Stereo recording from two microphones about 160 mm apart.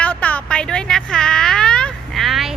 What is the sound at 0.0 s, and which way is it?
Music, 10° left (ahead or behind).